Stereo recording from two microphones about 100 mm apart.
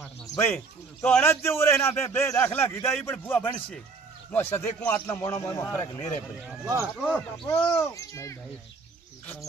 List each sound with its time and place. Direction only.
1.0 s speech: 15° left (ahead or behind)
1.3 s a man's voice: 25° left (ahead or behind)
5.0 s a man's voice: 30° left (ahead or behind)
6.6 s speech: 30° right (ahead or behind)
7.0 s speech: 10° left (ahead or behind)
7.9 s a man's voice: 30° left (ahead or behind)